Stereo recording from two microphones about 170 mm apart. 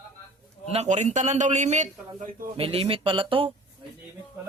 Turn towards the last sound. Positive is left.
turn(degrees=-30)  # may be behind; listen again after turning